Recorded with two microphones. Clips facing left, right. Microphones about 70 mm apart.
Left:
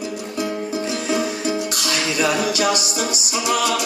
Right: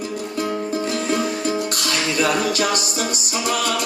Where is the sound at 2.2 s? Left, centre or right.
Right.